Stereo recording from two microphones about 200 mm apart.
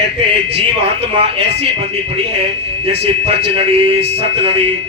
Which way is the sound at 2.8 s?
30° right (ahead or behind).